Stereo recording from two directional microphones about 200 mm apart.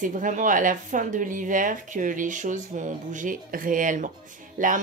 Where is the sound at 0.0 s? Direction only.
40° right (ahead or behind).